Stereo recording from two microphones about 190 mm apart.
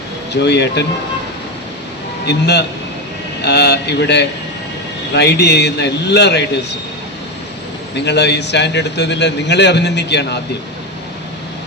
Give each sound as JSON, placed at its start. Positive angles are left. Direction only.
{"t": 0.4, "sound": "a man's voice", "side_deg": 65}
{"t": 2.2, "sound": "a man's voice", "side_deg": 60}
{"t": 8.0, "sound": "a man's voice", "side_deg": 65}